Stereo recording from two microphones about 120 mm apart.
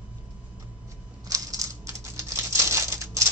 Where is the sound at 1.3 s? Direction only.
25° right (ahead or behind).